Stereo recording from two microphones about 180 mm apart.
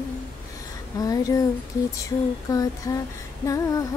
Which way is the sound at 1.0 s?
20° left (ahead or behind).